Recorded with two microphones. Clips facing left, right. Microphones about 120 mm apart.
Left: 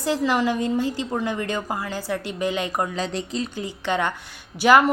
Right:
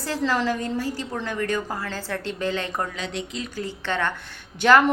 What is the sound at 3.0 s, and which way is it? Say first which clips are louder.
Speech: left 4 dB; 35° left (ahead or behind).